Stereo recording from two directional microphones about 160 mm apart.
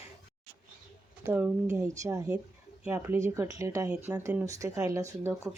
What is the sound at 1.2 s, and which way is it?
Speech, 10° right (ahead or behind).